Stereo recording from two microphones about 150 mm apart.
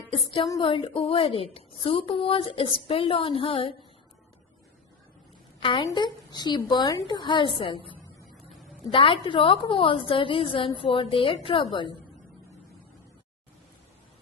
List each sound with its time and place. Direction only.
0.6 s a woman's voice: 35° left (ahead or behind)
5.5 s a woman's voice: 35° left (ahead or behind)
8.9 s a woman's voice: 35° left (ahead or behind)